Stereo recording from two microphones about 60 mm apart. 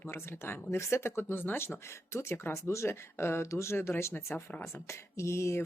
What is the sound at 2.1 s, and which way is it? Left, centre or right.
Speech, left.